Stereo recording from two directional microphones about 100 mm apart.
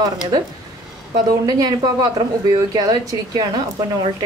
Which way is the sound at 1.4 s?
40° right (ahead or behind).